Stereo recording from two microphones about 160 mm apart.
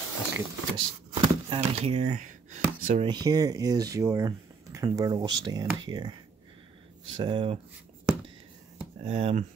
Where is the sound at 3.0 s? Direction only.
25° right (ahead or behind).